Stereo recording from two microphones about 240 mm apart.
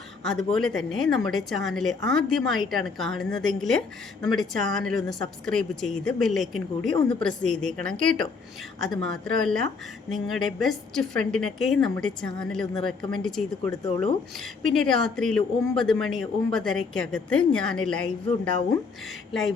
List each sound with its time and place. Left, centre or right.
0.3 s speech: centre
13.6 s speech: left
14.6 s speech: centre
19.3 s a sound: centre